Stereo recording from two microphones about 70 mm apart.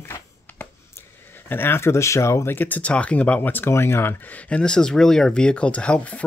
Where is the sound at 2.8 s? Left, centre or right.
Centre; by 4.1 s left.